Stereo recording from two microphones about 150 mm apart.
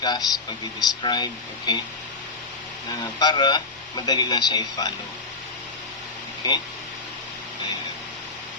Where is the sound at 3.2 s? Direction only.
30° left (ahead or behind).